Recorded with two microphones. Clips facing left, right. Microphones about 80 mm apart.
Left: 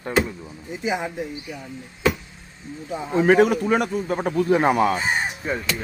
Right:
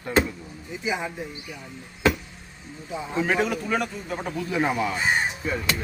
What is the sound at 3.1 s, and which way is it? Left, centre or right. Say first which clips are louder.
A man's voice: left 8 dB; left.